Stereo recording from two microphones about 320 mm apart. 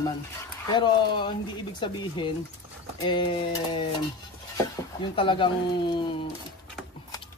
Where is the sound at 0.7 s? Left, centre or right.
Centre.